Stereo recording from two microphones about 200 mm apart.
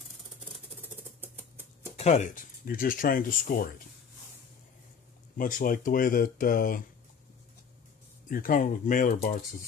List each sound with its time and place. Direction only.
1.2 s typewriter: 10° right (ahead or behind)
2.0 s speech: 35° left (ahead or behind)
5.4 s speech: 45° left (ahead or behind)
8.3 s speech: 45° left (ahead or behind)